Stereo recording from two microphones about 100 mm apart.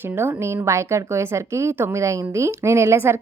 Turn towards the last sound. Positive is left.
turn(degrees=-25)  # may be behind; listen again after turning